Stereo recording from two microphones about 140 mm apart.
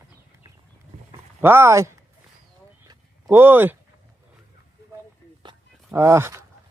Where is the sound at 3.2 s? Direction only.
15° right (ahead or behind).